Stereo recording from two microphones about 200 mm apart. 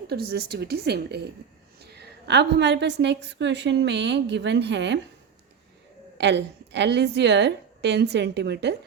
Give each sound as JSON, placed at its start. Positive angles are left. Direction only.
{"t": 0.1, "sound": "a woman's voice", "side_deg": -50}
{"t": 6.1, "sound": "a woman's voice", "side_deg": -60}